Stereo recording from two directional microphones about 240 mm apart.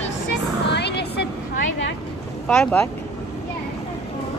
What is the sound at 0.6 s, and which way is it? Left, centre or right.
Music, left.